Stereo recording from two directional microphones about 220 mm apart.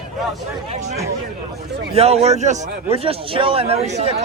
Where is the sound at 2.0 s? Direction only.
30° right (ahead or behind).